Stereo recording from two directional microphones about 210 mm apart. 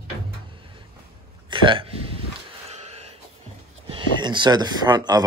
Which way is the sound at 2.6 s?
30° right (ahead or behind).